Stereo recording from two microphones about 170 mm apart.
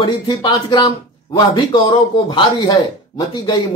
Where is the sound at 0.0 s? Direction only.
25° left (ahead or behind).